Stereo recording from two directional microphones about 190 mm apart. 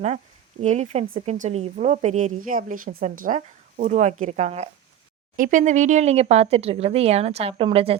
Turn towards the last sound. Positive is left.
turn(degrees=-30)  # may be behind; listen again after turning